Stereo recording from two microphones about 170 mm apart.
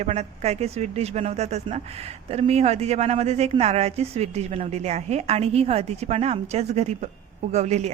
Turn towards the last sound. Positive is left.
turn(degrees=-40)  # may be behind; listen again after turning